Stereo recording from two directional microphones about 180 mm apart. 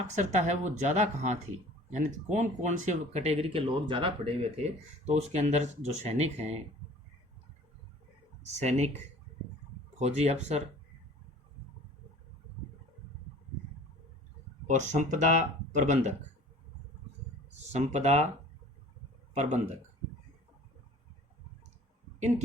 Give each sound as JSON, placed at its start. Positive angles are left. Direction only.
{"t": 0.2, "sound": "speech", "side_deg": -40}
{"t": 8.5, "sound": "speech", "side_deg": -40}
{"t": 10.0, "sound": "speech", "side_deg": -40}
{"t": 14.7, "sound": "speech", "side_deg": -40}
{"t": 17.5, "sound": "speech", "side_deg": -40}
{"t": 19.3, "sound": "speech", "side_deg": -40}